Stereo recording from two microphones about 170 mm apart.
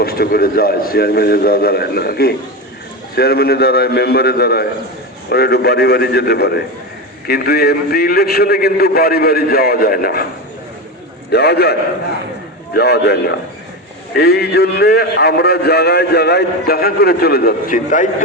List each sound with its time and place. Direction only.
0.0 s a man's voice: 65° left (ahead or behind)
11.3 s a man's voice: 75° left (ahead or behind); by 18.1 s 50° left (ahead or behind)